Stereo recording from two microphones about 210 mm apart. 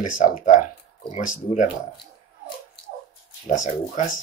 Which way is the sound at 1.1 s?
35° left (ahead or behind).